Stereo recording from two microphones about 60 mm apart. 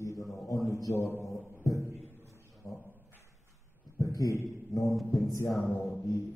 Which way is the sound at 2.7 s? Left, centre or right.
Left.